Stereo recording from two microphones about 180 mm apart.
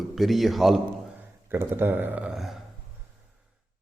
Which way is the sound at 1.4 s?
15° right (ahead or behind).